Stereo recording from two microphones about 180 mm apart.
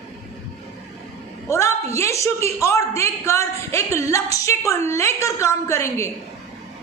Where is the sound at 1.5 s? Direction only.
15° left (ahead or behind).